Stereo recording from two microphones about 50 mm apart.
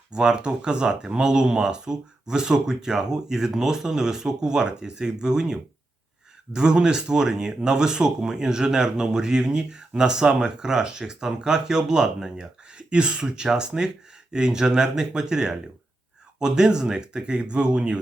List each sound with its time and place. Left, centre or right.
0.1 s speech: centre